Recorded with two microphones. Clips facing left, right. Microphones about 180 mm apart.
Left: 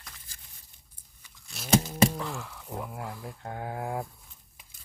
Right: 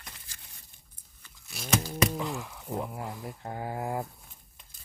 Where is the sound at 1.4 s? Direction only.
Centre (ahead or behind).